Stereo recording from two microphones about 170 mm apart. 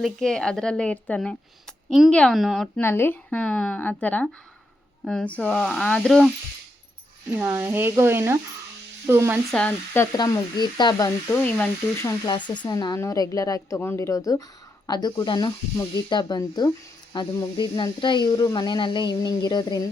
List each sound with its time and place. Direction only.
0.0 s a woman's voice: centre (ahead or behind)
2.8 s a woman's voice: 15° left (ahead or behind)
7.4 s speech: 20° right (ahead or behind)
9.5 s speech: 5° left (ahead or behind); by 11.1 s 25° left (ahead or behind)
11.3 s speech: 10° left (ahead or behind)